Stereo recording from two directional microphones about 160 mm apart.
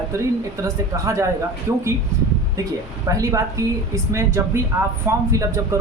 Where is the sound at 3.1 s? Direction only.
20° right (ahead or behind).